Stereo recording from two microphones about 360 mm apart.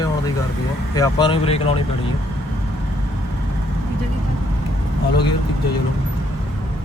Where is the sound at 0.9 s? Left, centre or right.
Centre.